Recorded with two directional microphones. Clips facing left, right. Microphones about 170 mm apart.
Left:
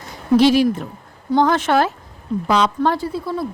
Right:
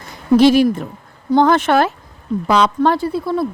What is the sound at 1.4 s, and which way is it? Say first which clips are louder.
Speech: right 3 dB; 60° right (ahead or behind).